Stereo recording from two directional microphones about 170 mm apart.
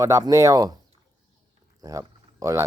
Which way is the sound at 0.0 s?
20° right (ahead or behind).